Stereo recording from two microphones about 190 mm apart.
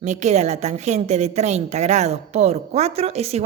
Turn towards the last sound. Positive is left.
turn(degrees=-35)  # may be behind; listen again after turning